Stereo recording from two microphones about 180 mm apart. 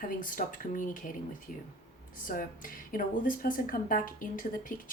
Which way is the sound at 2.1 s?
50° left (ahead or behind).